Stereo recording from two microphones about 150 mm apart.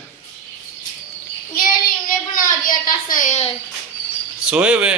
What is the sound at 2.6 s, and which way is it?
Speech, 65° left (ahead or behind).